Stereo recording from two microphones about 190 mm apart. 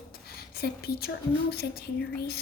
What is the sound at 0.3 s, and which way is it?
A woman's voice, 55° left (ahead or behind).